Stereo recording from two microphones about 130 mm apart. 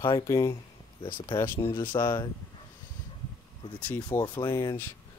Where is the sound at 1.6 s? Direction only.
40° left (ahead or behind).